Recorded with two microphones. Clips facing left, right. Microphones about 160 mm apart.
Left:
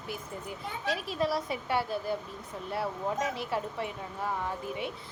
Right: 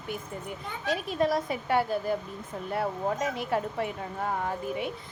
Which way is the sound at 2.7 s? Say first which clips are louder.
Right 3 dB; 55° right (ahead or behind).